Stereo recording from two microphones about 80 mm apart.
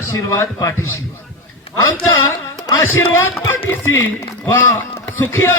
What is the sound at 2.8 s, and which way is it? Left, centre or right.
A man's voice, left.